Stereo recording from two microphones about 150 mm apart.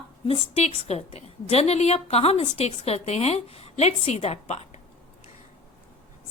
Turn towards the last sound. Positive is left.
turn(degrees=45)  # may be behind; listen again after turning